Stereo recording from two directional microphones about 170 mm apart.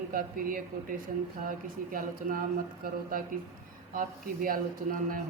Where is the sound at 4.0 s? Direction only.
55° right (ahead or behind).